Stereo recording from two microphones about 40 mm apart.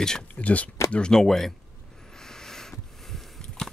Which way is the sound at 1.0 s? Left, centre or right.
Centre.